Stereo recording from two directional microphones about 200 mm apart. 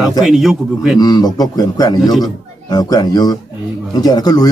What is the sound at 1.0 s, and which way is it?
A man's voice, 20° left (ahead or behind).